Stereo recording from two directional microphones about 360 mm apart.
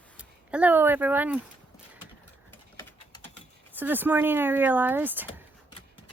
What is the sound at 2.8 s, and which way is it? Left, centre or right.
Typing, centre.